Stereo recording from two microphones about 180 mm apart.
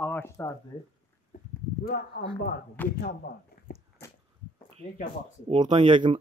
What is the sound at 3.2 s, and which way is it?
Speech, 60° left (ahead or behind).